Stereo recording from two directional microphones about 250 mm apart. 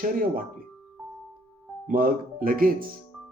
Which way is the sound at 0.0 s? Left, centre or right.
Right.